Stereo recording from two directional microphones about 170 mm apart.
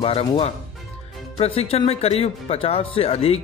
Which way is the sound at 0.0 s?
30° left (ahead or behind).